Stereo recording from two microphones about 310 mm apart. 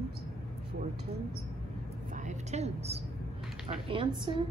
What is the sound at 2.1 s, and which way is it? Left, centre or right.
A woman's voice, right.